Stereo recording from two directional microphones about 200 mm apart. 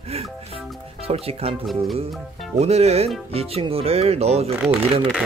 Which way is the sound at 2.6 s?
30° right (ahead or behind).